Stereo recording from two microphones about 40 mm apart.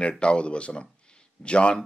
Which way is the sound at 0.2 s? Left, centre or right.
Left.